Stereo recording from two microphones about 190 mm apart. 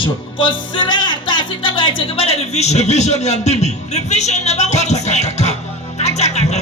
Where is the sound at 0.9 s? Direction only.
25° left (ahead or behind).